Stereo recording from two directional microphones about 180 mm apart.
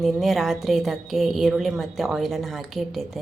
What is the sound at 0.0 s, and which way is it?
A woman's voice, centre (ahead or behind).